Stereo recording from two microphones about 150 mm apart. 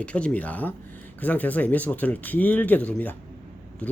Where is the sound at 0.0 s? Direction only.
10° left (ahead or behind).